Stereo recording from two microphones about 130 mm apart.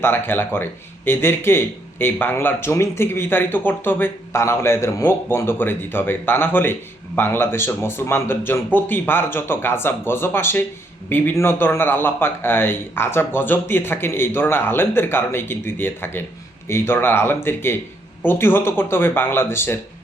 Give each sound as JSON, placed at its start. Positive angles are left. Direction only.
{"t": 0.0, "sound": "speech", "side_deg": 15}